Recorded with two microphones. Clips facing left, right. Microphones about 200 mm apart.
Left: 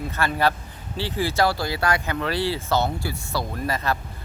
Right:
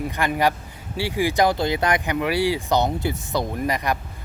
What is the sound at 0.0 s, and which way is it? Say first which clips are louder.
Speech: right 2 dB; 15° right (ahead or behind).